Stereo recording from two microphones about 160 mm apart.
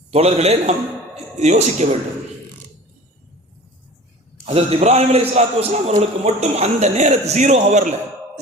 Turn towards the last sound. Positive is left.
turn(degrees=-50)  # may be behind; listen again after turning